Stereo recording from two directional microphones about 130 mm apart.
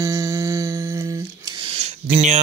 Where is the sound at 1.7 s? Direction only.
55° right (ahead or behind).